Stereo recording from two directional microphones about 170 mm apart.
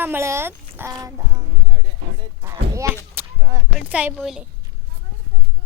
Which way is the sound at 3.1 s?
20° right (ahead or behind).